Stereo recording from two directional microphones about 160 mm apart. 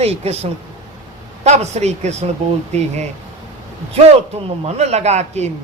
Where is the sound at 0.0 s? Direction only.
40° right (ahead or behind).